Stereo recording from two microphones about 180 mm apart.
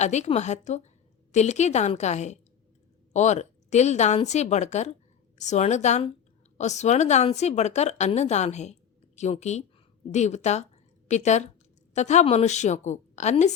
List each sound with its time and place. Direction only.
0.0 s speech: 40° left (ahead or behind)